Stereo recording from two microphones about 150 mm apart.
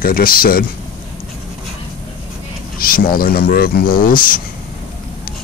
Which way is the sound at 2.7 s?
70° left (ahead or behind).